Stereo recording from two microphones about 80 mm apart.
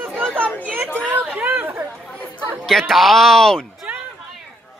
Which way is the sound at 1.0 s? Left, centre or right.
Right.